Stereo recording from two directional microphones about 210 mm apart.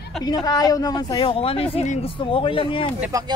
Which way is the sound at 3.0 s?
15° right (ahead or behind).